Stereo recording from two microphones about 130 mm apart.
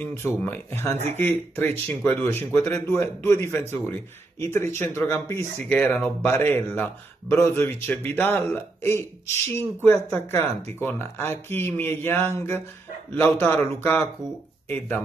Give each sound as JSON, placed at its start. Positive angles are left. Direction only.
{"t": 0.0, "sound": "speech", "side_deg": 15}